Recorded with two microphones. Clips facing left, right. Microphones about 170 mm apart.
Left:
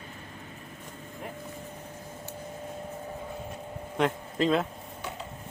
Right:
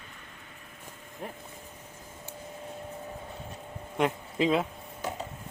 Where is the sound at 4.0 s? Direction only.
10° right (ahead or behind).